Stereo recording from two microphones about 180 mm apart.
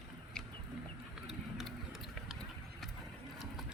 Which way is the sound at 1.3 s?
Centre (ahead or behind).